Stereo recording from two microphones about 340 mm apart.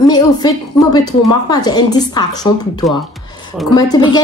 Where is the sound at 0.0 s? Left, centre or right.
Centre.